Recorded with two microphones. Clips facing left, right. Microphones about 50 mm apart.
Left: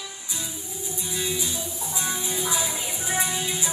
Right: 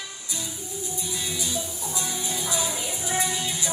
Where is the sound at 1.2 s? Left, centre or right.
Left.